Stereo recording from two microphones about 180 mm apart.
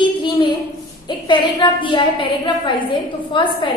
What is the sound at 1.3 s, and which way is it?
A woman's voice, 25° left (ahead or behind).